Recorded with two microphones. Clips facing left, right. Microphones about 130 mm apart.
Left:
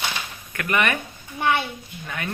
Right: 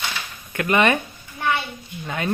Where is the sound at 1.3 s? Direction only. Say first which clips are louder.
Left 1 dB; 20° left (ahead or behind).